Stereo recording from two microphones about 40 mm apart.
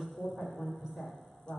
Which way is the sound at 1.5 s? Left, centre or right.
Left.